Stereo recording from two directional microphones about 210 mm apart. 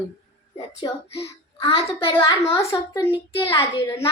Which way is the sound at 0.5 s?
20° left (ahead or behind).